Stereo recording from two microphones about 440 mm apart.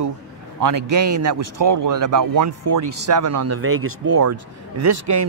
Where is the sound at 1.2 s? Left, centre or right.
Right.